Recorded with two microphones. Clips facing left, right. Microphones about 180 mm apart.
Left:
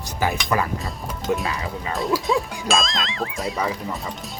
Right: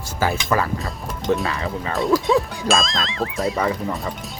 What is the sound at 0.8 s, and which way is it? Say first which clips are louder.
Speech: right 2 dB; centre (ahead or behind).